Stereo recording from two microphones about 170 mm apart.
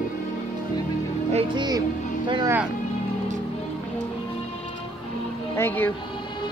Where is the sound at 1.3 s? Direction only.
25° right (ahead or behind).